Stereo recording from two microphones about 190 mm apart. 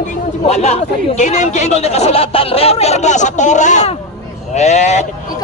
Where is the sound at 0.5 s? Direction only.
35° left (ahead or behind).